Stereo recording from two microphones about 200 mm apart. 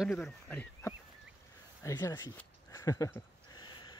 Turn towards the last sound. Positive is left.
turn(degrees=25)  # may be behind; listen again after turning